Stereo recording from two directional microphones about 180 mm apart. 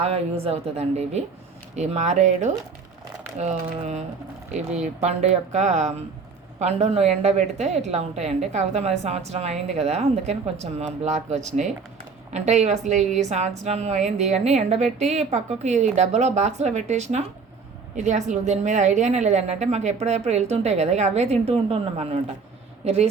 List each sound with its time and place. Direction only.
0.0 s a woman's voice: 35° right (ahead or behind)